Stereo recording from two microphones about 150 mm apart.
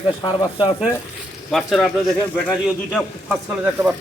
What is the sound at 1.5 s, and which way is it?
A man's voice, centre (ahead or behind).